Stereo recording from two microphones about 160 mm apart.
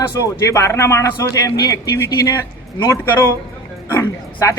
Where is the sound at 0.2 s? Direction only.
20° left (ahead or behind).